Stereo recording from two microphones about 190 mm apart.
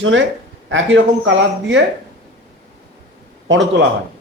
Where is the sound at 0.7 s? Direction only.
80° right.